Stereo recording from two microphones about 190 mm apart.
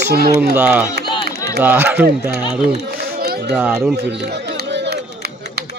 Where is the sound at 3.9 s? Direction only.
65° right (ahead or behind).